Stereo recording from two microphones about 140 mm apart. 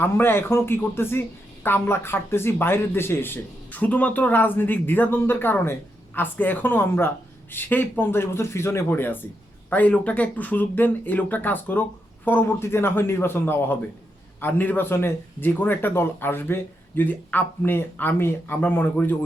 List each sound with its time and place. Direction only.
0.0 s speech: 15° left (ahead or behind)